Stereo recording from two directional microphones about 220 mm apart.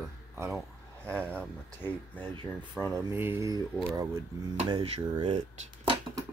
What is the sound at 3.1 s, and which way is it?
Speech, 10° right (ahead or behind).